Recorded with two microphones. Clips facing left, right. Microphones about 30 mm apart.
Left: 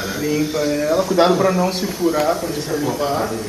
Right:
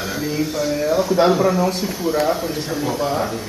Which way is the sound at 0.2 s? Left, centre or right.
Centre.